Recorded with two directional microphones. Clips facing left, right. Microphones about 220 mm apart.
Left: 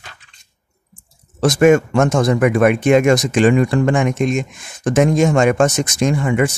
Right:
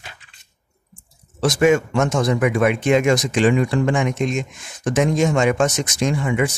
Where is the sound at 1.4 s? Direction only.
50° left (ahead or behind).